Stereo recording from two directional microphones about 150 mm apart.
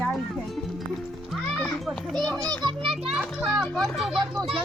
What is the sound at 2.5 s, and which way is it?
Speech, 30° right (ahead or behind).